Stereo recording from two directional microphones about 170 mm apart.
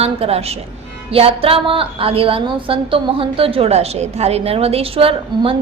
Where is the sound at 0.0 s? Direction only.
35° right (ahead or behind).